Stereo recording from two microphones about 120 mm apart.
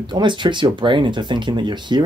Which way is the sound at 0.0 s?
40° right (ahead or behind).